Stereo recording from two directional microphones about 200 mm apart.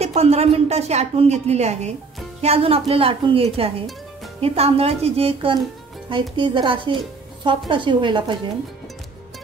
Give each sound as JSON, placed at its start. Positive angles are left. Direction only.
{"t": 0.0, "sound": "a woman's voice", "side_deg": -30}